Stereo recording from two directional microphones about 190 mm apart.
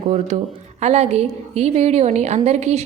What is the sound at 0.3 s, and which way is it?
A woman's voice, 40° right (ahead or behind).